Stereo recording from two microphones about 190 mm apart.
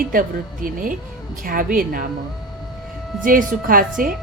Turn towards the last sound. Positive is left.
turn(degrees=-50)  # may be behind; listen again after turning